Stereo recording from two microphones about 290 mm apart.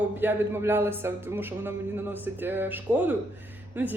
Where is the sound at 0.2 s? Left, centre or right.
Centre.